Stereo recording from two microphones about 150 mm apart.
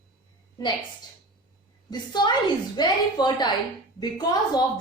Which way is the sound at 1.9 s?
30° left (ahead or behind).